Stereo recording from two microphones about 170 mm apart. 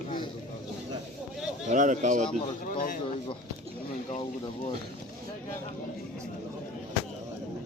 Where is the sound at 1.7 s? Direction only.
45° right (ahead or behind).